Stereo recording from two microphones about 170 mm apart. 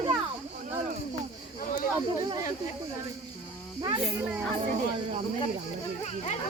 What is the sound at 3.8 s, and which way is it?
Speech, 30° right (ahead or behind).